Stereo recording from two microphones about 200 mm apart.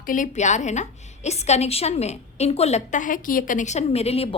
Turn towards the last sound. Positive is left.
turn(degrees=30)  # may be behind; listen again after turning